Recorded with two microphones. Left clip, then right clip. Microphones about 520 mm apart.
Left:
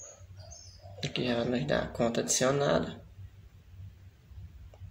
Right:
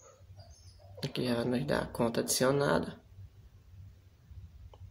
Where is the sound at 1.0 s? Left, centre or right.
Right.